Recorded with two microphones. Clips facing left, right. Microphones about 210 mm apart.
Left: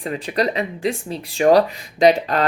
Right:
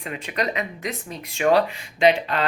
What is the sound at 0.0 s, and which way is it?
Speech, 35° left (ahead or behind).